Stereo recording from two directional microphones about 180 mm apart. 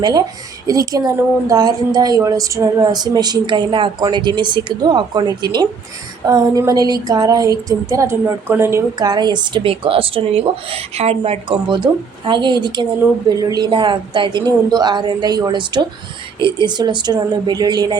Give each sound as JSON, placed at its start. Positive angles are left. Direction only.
{"t": 0.0, "sound": "a woman's voice", "side_deg": -20}